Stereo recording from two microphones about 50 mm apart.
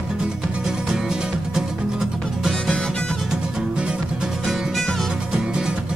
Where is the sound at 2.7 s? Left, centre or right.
Centre.